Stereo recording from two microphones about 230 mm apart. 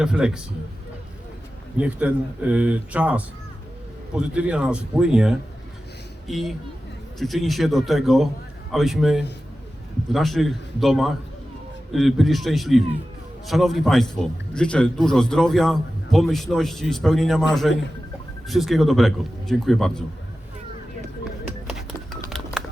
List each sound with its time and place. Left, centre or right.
0.0 s a man's voice: centre
1.8 s a man's voice: centre
21.7 s a sound: centre